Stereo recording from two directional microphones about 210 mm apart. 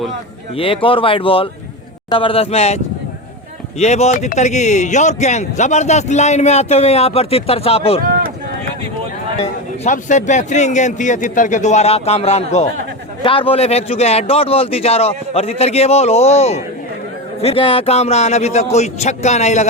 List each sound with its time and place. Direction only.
0.5 s speech: 25° left (ahead or behind)
9.4 s speech: 35° left (ahead or behind)